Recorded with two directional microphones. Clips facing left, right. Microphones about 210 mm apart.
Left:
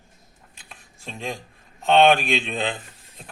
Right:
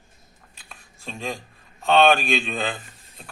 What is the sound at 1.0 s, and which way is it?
Speech, 15° left (ahead or behind).